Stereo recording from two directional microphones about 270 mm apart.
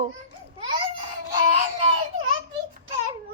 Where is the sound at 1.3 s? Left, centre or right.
Centre.